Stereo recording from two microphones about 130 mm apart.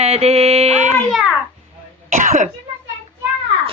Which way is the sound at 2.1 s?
75° right (ahead or behind).